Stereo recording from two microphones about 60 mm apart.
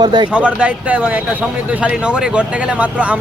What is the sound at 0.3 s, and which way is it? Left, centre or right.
A man's voice, centre.